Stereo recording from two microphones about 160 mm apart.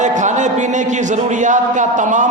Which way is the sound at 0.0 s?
50° right (ahead or behind).